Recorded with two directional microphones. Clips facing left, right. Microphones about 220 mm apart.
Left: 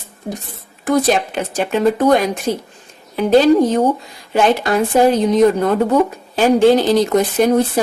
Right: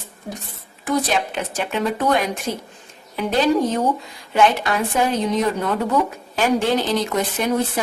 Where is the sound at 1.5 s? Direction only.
45° left (ahead or behind).